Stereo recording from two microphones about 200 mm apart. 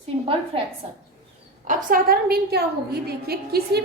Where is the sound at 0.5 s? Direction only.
30° right (ahead or behind).